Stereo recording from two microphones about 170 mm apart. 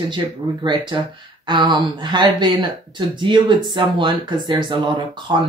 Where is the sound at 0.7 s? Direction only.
30° right (ahead or behind).